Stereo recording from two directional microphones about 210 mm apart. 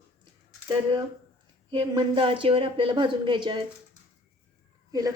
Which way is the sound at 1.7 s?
25° right (ahead or behind).